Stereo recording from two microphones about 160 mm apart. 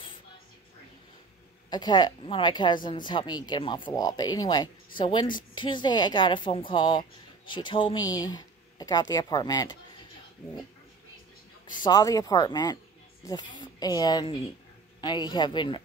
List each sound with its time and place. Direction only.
1.7 s speech: 25° left (ahead or behind)
11.8 s speech: 25° left (ahead or behind)